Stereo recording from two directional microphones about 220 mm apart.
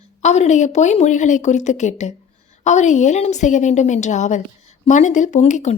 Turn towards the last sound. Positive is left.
turn(degrees=30)  # may be behind; listen again after turning